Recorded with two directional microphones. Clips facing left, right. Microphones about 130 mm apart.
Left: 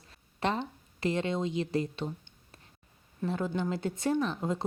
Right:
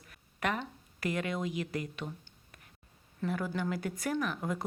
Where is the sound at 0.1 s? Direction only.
25° left (ahead or behind).